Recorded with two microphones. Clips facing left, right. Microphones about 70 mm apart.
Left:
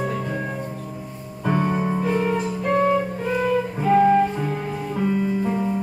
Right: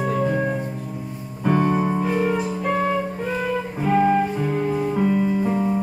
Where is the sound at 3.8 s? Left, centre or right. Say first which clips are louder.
Left 2 dB; centre.